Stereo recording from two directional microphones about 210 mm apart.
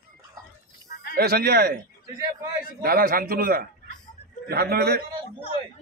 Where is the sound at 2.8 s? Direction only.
45° right (ahead or behind).